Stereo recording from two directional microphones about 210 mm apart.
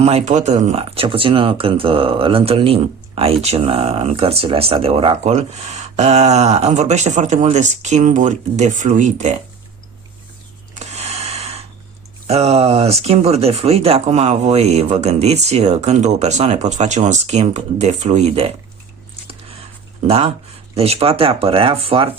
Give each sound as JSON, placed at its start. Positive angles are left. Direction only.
{"t": 0.0, "sound": "speech", "side_deg": -30}
{"t": 10.8, "sound": "a sound", "side_deg": -30}
{"t": 12.3, "sound": "speech", "side_deg": -30}
{"t": 20.1, "sound": "speech", "side_deg": -30}